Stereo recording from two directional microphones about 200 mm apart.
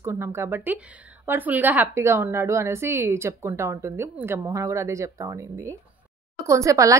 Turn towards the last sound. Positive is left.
turn(degrees=-15)  # may be behind; listen again after turning